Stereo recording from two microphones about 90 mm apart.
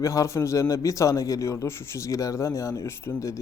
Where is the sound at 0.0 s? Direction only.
35° left (ahead or behind).